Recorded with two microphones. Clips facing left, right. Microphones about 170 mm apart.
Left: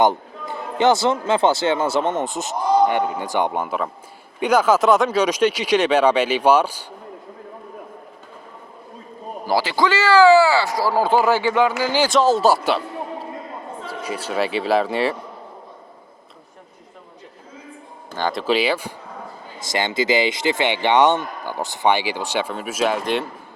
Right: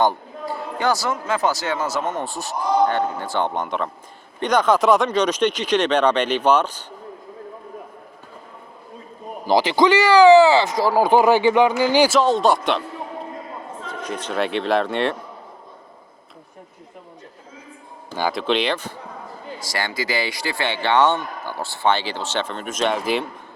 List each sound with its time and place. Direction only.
0.0 s speech: 20° left (ahead or behind)
9.5 s speech: 20° right (ahead or behind)
12.1 s speech: centre (ahead or behind)
13.8 s speech: 5° left (ahead or behind)
18.1 s speech: 5° right (ahead or behind); by 18.9 s 10° left (ahead or behind)
19.5 s speech: 20° left (ahead or behind); by 23.3 s centre (ahead or behind)